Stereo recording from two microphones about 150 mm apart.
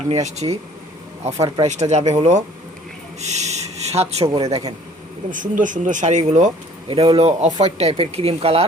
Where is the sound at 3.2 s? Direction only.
50° right (ahead or behind).